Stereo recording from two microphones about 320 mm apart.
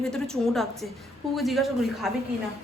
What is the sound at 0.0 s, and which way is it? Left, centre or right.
Speech, centre.